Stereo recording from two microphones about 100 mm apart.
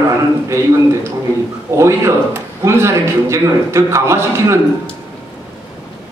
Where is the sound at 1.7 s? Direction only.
30° right (ahead or behind).